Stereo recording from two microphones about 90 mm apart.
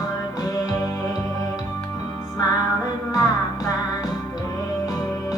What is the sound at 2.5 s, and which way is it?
Music, 45° left (ahead or behind).